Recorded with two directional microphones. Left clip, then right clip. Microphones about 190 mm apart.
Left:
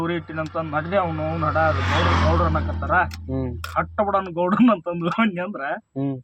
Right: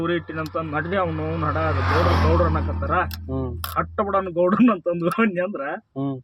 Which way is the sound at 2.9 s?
20° left (ahead or behind).